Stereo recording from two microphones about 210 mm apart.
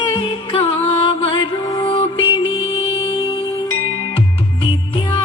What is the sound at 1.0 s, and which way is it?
Music, 25° left (ahead or behind).